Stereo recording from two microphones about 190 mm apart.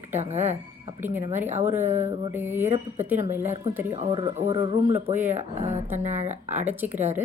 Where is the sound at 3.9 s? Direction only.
35° right (ahead or behind).